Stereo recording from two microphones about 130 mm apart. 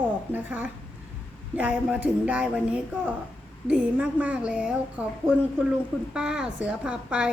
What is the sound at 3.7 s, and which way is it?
Speech, 10° right (ahead or behind).